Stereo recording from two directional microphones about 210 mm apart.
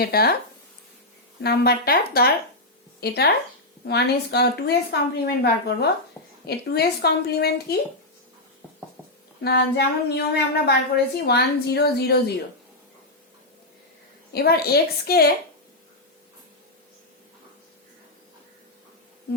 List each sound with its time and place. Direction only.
0.0 s a woman's voice: 45° left (ahead or behind)
1.4 s a woman's voice: 50° left (ahead or behind)
9.4 s a woman's voice: 50° left (ahead or behind)
14.3 s a woman's voice: 45° left (ahead or behind)